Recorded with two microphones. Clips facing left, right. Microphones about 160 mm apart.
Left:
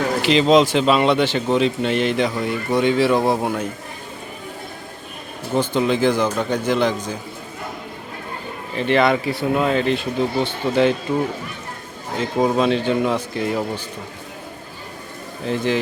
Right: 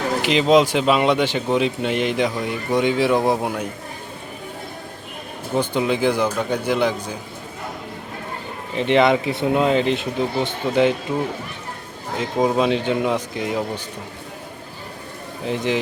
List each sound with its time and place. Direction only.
0.2 s speech: 10° right (ahead or behind)
5.5 s speech: 15° right (ahead or behind)
8.7 s speech: 20° right (ahead or behind)
12.5 s speech: 15° right (ahead or behind)
15.4 s speech: 15° right (ahead or behind)